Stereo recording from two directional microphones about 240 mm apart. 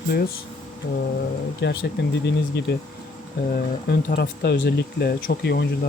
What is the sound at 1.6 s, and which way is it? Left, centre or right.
Speech, left.